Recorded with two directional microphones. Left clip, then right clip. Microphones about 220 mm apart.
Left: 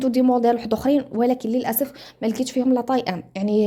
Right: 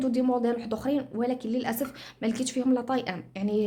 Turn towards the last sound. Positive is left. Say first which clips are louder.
# left 7 dB
turn(degrees=25)  # may be behind; listen again after turning